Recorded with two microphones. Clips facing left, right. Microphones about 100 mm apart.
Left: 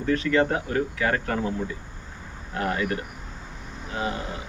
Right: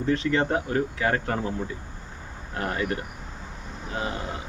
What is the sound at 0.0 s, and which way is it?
Speech, 25° right (ahead or behind).